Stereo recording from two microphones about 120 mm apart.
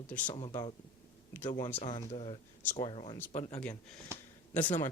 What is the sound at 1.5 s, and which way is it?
Speech, 35° left (ahead or behind).